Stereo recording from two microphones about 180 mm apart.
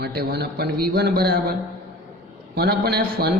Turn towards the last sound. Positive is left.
turn(degrees=-60)  # may be behind; listen again after turning